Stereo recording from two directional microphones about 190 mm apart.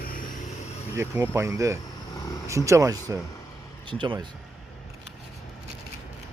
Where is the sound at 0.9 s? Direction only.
15° right (ahead or behind).